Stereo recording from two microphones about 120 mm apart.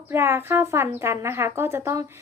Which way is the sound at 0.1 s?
20° right (ahead or behind).